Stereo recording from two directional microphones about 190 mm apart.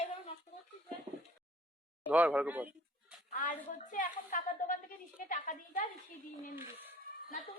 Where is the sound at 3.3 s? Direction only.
45° left (ahead or behind).